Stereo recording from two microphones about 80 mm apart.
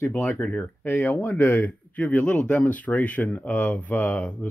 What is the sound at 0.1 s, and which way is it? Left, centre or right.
Speech, left.